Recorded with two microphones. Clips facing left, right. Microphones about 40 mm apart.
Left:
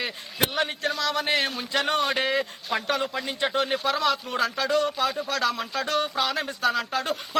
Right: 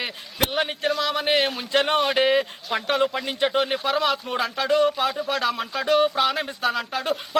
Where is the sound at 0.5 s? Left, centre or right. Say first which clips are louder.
Right 3 dB; centre.